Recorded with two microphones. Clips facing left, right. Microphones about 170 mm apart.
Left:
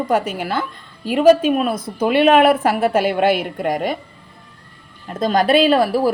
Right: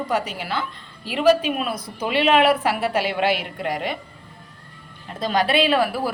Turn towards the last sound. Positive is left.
turn(degrees=40)  # may be behind; listen again after turning